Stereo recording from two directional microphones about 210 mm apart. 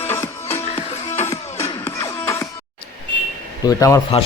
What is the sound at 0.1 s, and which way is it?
Music, 10° left (ahead or behind).